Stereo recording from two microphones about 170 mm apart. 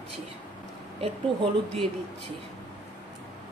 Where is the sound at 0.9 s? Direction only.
30° right (ahead or behind).